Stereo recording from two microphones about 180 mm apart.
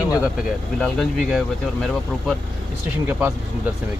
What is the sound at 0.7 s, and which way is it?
Speech, 5° left (ahead or behind).